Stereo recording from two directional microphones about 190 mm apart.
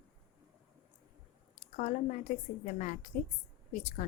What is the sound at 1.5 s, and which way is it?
A woman's voice, 40° left (ahead or behind).